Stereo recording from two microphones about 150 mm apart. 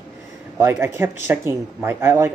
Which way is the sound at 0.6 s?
15° right (ahead or behind).